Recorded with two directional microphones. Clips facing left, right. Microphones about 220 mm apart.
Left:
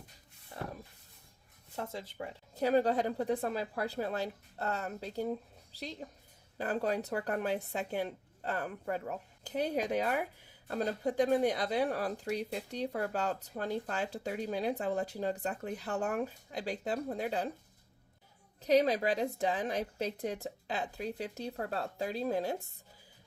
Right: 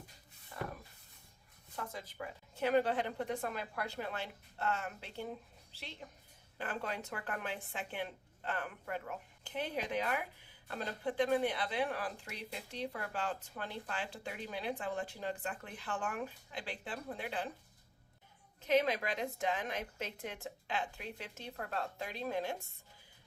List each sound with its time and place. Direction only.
1.7 s speech: 25° left (ahead or behind)
18.6 s speech: 35° left (ahead or behind)